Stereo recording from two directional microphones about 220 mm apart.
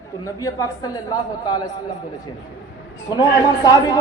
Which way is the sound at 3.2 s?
20° left (ahead or behind).